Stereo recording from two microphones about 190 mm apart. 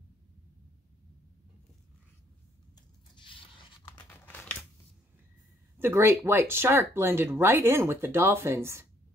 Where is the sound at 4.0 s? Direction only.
10° left (ahead or behind).